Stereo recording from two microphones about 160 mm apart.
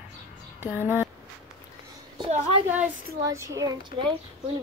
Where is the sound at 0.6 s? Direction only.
15° right (ahead or behind).